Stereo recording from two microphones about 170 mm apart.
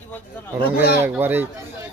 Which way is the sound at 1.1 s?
10° right (ahead or behind).